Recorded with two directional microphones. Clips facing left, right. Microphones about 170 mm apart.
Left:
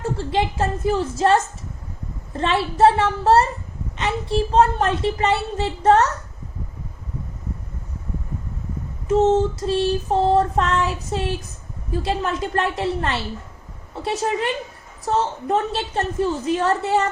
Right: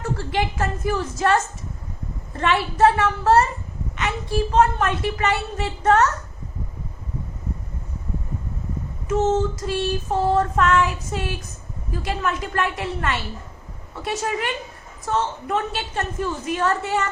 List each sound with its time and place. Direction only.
0.0 s a woman's voice: 25° left (ahead or behind)
9.0 s child singing: 30° left (ahead or behind)
13.9 s a woman's voice: 30° left (ahead or behind)
15.0 s child singing: 35° left (ahead or behind)